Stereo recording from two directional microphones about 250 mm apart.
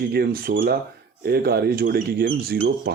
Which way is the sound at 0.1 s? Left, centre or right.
Right.